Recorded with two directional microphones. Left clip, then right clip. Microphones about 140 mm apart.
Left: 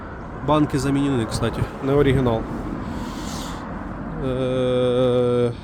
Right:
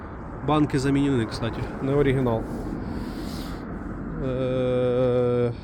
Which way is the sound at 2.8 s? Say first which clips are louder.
Left 3 dB; 25° left (ahead or behind).